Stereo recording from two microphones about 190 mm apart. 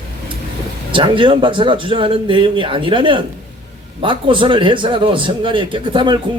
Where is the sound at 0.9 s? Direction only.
25° right (ahead or behind).